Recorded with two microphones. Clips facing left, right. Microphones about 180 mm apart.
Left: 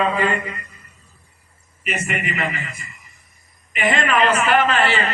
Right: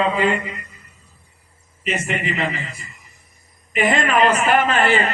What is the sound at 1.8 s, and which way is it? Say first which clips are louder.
Speech: right 2 dB; 30° right (ahead or behind).